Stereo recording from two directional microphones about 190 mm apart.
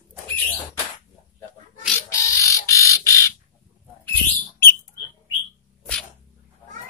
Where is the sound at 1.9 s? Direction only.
15° left (ahead or behind).